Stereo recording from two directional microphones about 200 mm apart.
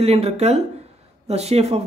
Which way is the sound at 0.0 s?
30° right (ahead or behind).